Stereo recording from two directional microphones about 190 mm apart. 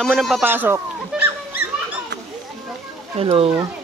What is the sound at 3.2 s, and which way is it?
Speech, 30° right (ahead or behind).